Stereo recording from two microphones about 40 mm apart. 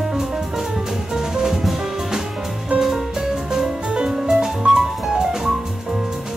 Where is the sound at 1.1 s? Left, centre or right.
Centre.